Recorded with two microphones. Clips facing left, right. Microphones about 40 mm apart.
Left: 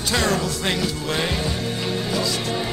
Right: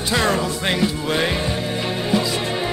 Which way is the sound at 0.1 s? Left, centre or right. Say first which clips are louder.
Right 2 dB; centre.